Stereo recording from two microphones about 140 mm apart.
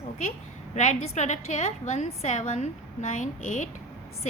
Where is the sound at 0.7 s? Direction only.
55° left (ahead or behind).